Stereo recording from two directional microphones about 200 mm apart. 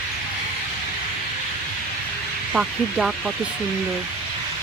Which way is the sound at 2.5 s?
Centre (ahead or behind).